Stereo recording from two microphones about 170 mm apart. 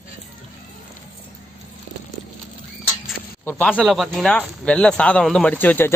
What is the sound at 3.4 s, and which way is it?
Speech, 10° left (ahead or behind).